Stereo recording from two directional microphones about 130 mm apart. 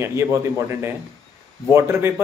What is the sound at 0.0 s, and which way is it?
A man's voice, 20° right (ahead or behind).